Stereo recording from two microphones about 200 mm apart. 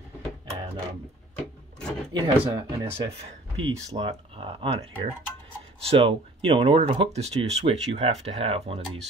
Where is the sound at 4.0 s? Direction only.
30° right (ahead or behind).